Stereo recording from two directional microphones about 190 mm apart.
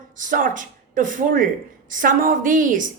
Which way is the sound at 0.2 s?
45° right (ahead or behind).